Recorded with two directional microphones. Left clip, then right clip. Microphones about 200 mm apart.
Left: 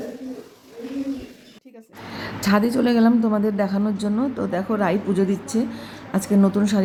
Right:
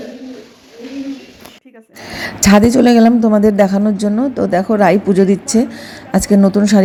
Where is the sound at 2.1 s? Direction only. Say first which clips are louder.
Right 10 dB; 30° right (ahead or behind).